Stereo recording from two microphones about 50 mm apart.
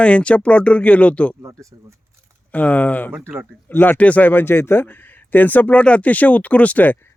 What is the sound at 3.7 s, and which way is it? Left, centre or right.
Speech, left.